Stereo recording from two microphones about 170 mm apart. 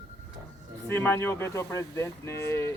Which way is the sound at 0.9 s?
15° left (ahead or behind).